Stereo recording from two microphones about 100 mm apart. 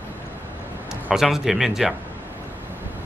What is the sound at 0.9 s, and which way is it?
A man's voice, 5° right (ahead or behind).